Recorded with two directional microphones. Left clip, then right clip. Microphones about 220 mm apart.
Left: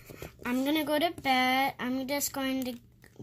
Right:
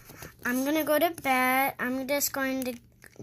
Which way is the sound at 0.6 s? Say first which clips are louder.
Right 3 dB; 20° left (ahead or behind).